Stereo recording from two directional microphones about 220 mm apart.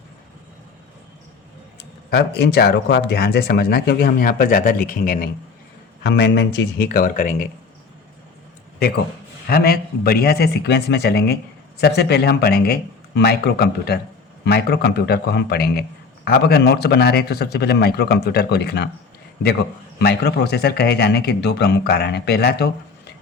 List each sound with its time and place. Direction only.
1.8 s speech: 45° left (ahead or behind)
6.0 s speech: 50° left (ahead or behind)
9.5 s speech: 45° left (ahead or behind)
20.0 s speech: 50° left (ahead or behind)